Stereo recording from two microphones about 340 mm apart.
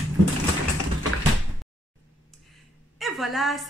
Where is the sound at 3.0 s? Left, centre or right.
Centre.